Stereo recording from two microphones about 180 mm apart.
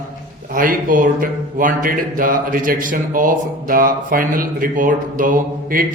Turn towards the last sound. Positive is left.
turn(degrees=-50)  # may be behind; listen again after turning